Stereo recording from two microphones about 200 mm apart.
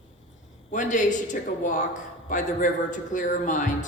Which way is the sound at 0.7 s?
40° left (ahead or behind).